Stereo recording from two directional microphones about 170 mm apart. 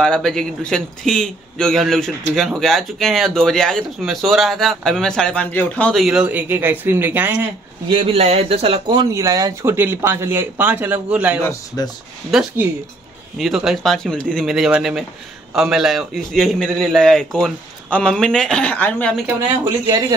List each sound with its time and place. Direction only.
0.0 s speech: 5° left (ahead or behind)
7.9 s speech: 30° right (ahead or behind); by 11.4 s 10° right (ahead or behind)
11.4 s speech: 20° left (ahead or behind)
12.3 s speech: 5° right (ahead or behind)